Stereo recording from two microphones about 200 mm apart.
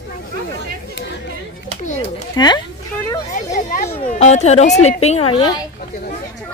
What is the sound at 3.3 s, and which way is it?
Speech, 40° left (ahead or behind).